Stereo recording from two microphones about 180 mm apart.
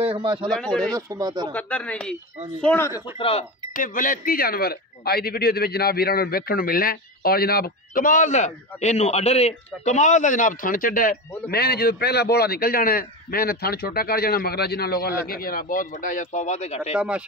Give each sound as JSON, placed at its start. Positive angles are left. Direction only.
{"t": 0.0, "sound": "speech", "side_deg": -30}
{"t": 0.5, "sound": "speech", "side_deg": 5}
{"t": 0.9, "sound": "speech", "side_deg": -20}
{"t": 1.5, "sound": "speech", "side_deg": 10}
{"t": 3.2, "sound": "speech", "side_deg": 30}
{"t": 3.7, "sound": "speech", "side_deg": 50}
{"t": 11.5, "sound": "a man's voice", "side_deg": 60}
{"t": 16.9, "sound": "speech", "side_deg": -5}